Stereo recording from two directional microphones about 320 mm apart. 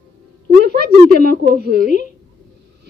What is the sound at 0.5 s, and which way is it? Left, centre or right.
A child's voice, right.